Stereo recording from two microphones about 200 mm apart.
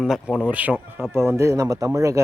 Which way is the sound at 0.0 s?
5° right (ahead or behind).